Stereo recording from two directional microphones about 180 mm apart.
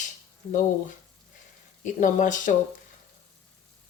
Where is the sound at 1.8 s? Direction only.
45° left (ahead or behind).